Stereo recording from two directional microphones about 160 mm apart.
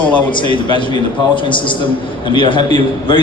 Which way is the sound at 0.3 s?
30° left (ahead or behind).